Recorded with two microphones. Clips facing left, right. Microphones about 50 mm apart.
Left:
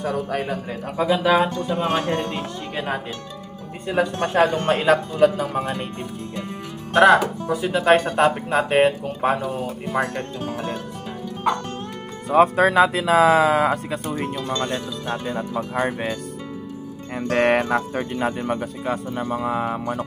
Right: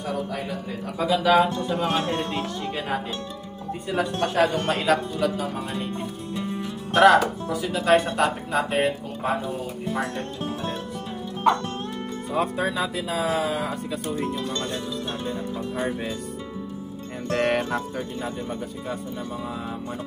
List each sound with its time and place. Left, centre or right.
0.0 s speech: left
0.9 s speech: left
2.3 s speech: left
7.0 s speech: centre
7.6 s speech: left
12.3 s speech: left
13.3 s speech: left
17.2 s speech: left